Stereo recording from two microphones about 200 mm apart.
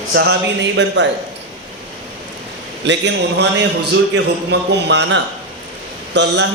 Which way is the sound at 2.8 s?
60° right (ahead or behind).